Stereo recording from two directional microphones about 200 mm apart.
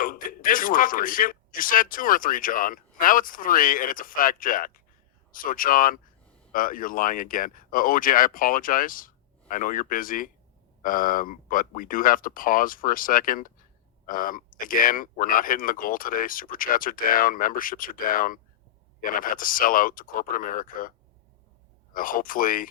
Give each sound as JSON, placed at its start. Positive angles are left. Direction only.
{"t": 0.0, "sound": "speech", "side_deg": 45}
{"t": 21.9, "sound": "speech", "side_deg": 45}